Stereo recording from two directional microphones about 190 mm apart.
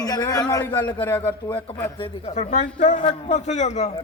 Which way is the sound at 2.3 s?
40° left (ahead or behind).